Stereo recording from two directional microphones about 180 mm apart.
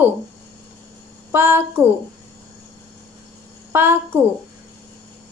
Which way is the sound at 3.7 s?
10° right (ahead or behind).